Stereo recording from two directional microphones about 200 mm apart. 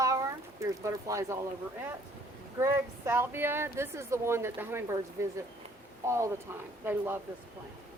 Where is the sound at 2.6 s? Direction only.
10° right (ahead or behind).